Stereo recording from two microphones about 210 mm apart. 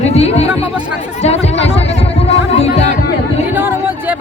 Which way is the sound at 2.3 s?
30° left (ahead or behind).